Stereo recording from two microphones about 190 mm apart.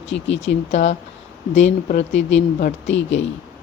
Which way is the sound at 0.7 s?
35° left (ahead or behind).